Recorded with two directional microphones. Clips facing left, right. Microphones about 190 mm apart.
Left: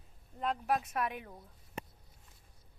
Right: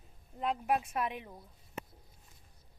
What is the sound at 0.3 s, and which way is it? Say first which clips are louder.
Speech: right 1 dB; 10° right (ahead or behind).